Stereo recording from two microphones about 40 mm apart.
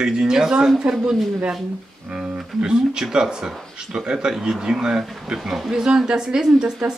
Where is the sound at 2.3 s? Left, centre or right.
Centre.